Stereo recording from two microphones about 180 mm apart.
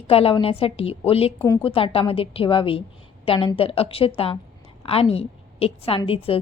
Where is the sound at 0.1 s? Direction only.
30° left (ahead or behind).